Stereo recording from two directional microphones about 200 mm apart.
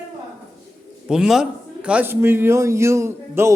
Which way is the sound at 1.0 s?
5° right (ahead or behind).